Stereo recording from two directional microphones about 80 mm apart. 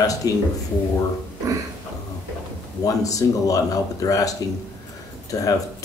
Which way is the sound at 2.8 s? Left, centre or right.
Left.